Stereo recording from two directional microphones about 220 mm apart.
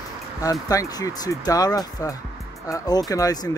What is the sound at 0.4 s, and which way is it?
Speech, 15° left (ahead or behind).